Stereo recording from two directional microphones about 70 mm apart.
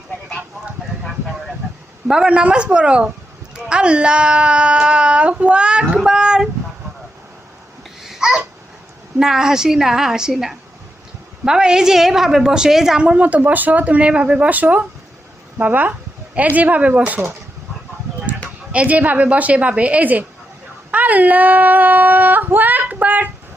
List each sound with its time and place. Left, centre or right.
2.0 s a woman's voice: centre
5.9 s a sound: centre
8.0 s babbling: centre
9.1 s a woman's voice: centre
18.7 s speech: centre